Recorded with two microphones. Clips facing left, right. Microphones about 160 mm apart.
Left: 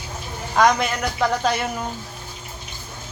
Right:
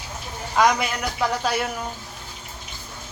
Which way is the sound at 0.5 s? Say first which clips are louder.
Left 2 dB; 5° right (ahead or behind).